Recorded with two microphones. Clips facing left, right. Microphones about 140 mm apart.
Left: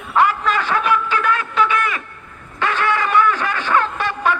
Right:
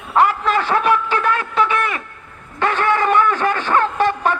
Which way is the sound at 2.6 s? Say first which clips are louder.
Right 2 dB; 45° right (ahead or behind).